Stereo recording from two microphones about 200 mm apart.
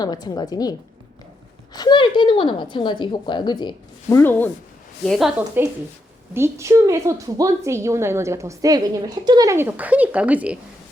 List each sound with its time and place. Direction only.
0.0 s a woman's voice: 20° left (ahead or behind)
4.2 s a woman's voice: 10° left (ahead or behind)
5.6 s a woman's voice: 10° right (ahead or behind)